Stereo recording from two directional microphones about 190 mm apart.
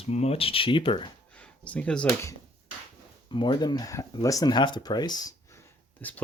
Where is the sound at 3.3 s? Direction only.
25° left (ahead or behind).